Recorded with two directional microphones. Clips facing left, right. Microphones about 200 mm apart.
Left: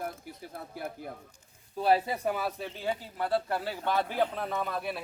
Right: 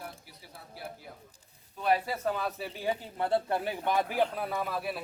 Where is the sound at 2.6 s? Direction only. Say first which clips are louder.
Right 1 dB; 10° right (ahead or behind).